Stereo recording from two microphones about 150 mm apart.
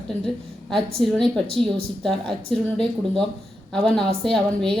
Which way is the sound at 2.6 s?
5° left (ahead or behind).